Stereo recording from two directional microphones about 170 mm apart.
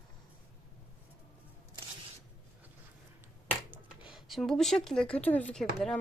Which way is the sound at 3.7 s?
5° right (ahead or behind).